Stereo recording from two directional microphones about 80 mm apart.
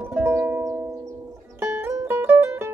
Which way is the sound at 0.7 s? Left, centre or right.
Right.